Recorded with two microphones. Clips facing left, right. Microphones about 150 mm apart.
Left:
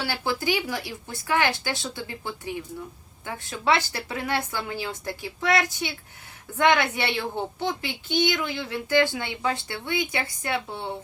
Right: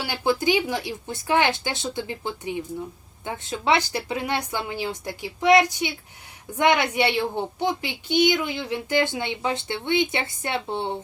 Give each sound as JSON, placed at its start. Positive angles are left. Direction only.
{"t": 0.0, "sound": "a woman's voice", "side_deg": -20}